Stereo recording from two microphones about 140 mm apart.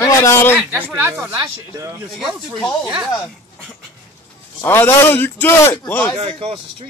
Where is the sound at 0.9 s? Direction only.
15° right (ahead or behind).